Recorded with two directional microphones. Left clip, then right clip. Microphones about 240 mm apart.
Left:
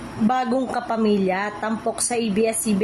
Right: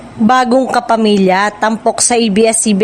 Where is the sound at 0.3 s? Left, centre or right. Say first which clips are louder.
Right 12 dB; right.